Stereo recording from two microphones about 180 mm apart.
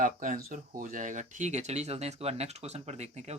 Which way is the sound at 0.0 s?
50° right (ahead or behind).